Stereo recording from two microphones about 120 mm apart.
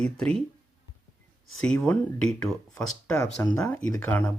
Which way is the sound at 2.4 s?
5° left (ahead or behind).